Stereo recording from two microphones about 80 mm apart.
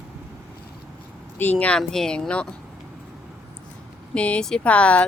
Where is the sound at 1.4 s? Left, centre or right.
Centre.